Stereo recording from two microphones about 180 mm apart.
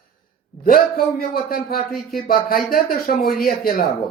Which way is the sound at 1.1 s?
55° left (ahead or behind).